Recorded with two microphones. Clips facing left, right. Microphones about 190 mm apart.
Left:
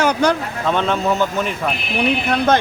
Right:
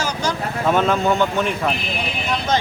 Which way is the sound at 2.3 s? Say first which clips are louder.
Left 3 dB; 60° left (ahead or behind).